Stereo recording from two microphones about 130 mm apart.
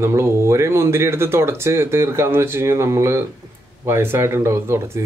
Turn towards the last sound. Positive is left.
turn(degrees=-20)  # may be behind; listen again after turning